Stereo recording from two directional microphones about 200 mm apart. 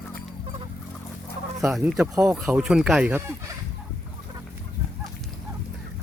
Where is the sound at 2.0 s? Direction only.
15° right (ahead or behind).